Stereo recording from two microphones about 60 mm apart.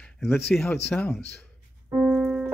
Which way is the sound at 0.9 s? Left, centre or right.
Centre.